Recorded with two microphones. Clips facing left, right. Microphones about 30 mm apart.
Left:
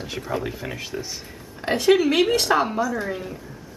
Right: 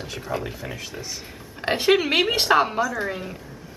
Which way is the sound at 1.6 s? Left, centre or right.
Right.